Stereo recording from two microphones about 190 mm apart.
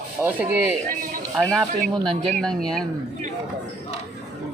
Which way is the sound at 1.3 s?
Centre (ahead or behind).